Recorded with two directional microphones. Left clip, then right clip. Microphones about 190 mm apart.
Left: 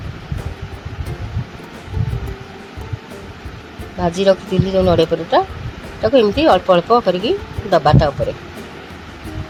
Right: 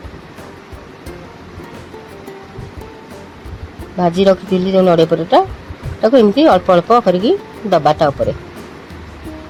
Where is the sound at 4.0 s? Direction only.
30° right (ahead or behind).